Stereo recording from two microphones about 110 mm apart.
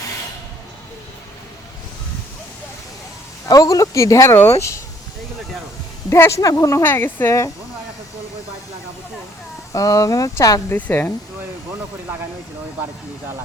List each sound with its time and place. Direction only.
3.4 s speech: 30° left (ahead or behind)
6.1 s speech: 25° left (ahead or behind)
6.8 s speech: 20° left (ahead or behind)
9.7 s speech: 35° left (ahead or behind)
10.8 s speech: 15° left (ahead or behind)